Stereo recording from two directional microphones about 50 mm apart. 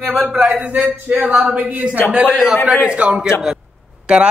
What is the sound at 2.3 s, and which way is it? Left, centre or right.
A man's voice, centre.